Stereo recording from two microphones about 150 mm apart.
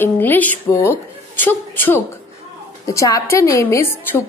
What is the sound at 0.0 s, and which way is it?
A woman's voice, 10° left (ahead or behind).